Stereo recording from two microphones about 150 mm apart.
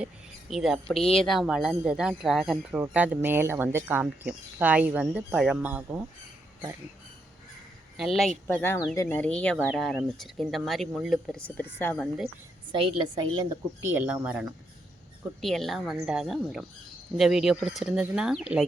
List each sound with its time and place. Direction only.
0.5 s speech: centre (ahead or behind)
7.9 s speech: centre (ahead or behind)
8.4 s speech: 15° left (ahead or behind)
12.7 s speech: 35° right (ahead or behind); by 14.4 s 10° right (ahead or behind)
15.4 s speech: centre (ahead or behind)